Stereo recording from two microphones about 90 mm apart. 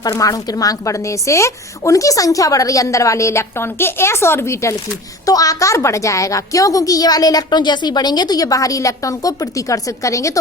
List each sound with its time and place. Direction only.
0.0 s a woman's voice: 40° left (ahead or behind)
5.2 s a woman's voice: 40° left (ahead or behind)